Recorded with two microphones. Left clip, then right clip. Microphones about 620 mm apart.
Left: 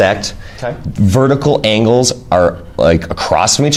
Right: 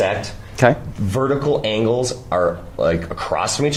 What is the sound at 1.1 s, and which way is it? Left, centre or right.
Speech, left.